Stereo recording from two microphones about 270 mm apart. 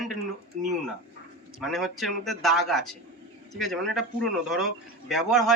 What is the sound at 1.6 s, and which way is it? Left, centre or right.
Speech, centre.